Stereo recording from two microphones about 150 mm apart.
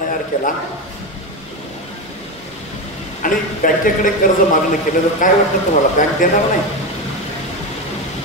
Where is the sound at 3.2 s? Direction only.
65° left (ahead or behind).